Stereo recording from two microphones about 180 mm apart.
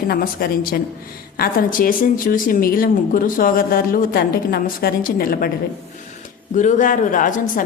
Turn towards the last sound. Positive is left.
turn(degrees=45)  # may be behind; listen again after turning